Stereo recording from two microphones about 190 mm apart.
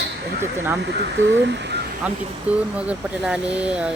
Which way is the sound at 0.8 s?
65° right (ahead or behind).